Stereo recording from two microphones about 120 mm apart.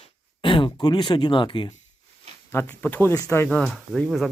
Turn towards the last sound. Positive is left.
turn(degrees=0)  # may be behind; listen again after turning